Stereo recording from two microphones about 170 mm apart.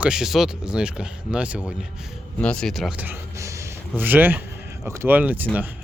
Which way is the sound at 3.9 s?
10° right (ahead or behind).